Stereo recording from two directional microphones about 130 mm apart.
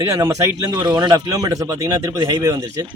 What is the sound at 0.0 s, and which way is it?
Speech, 20° right (ahead or behind).